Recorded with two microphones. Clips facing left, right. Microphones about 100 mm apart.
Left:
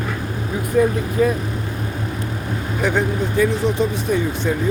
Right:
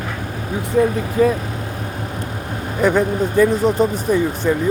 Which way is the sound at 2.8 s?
45° right (ahead or behind).